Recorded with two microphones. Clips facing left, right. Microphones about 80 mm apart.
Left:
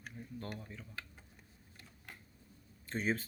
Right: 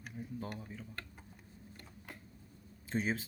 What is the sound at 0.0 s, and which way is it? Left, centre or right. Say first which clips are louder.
Speech: right 3 dB; centre.